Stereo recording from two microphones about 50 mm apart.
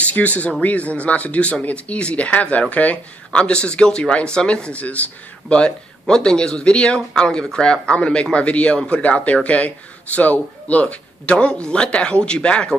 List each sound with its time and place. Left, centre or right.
0.0 s speech: left
3.3 s speech: left